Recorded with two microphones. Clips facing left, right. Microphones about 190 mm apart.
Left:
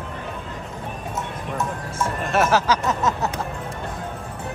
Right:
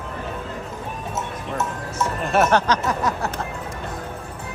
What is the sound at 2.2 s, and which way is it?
Speech, centre (ahead or behind).